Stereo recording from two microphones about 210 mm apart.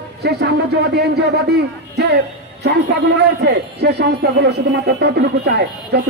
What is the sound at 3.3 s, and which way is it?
Speech, 50° right (ahead or behind).